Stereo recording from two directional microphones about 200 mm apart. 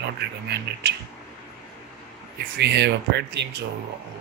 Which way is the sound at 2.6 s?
55° right (ahead or behind).